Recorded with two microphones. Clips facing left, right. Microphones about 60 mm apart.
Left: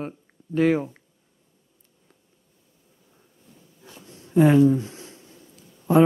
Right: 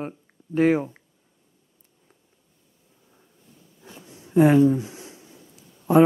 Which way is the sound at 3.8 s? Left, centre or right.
Centre.